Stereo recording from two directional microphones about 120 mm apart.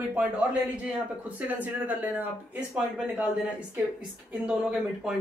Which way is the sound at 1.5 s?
15° right (ahead or behind).